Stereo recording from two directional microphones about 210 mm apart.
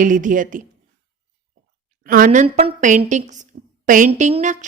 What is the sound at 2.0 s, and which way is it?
Speech, 40° right (ahead or behind).